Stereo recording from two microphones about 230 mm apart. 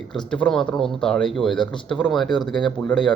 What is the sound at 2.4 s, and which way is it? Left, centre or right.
Speech, centre.